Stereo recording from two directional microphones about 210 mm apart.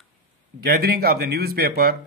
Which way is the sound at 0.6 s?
45° right (ahead or behind).